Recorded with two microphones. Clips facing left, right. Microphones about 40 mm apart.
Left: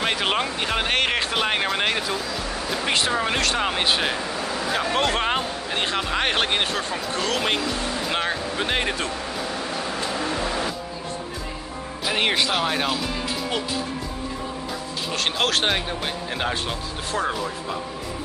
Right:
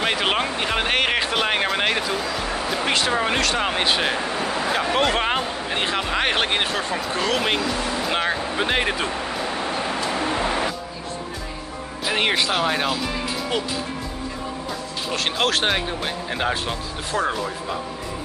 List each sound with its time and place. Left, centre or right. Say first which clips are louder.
0.0 s speech: right 1 dB; centre
9.3 s a sound: right 3 dB; right
10.2 s music: right 3 dB; right
12.0 s speech: right 1 dB; centre
15.0 s speech: right 1 dB; centre